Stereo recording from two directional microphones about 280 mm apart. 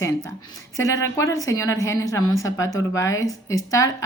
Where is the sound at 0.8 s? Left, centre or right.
Centre.